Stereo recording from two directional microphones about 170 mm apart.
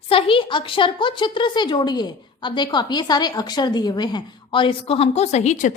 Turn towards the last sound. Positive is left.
turn(degrees=45)  # may be behind; listen again after turning